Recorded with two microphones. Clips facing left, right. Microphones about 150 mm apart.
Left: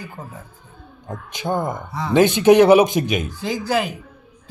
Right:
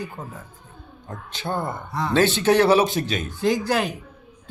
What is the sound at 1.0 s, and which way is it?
Speech, 15° left (ahead or behind).